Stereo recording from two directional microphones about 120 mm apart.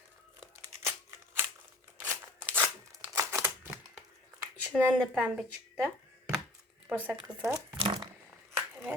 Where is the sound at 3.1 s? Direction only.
25° right (ahead or behind).